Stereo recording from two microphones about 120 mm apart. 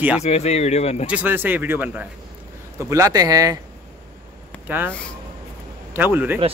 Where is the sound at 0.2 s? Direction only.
65° left (ahead or behind).